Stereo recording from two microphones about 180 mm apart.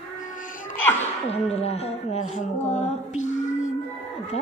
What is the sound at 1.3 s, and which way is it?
Speech, 35° left (ahead or behind).